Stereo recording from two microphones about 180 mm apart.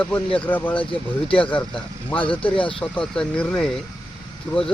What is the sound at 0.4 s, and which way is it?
Speech, 10° left (ahead or behind).